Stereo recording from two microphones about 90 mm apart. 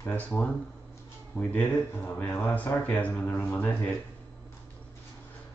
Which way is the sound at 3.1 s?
25° left (ahead or behind).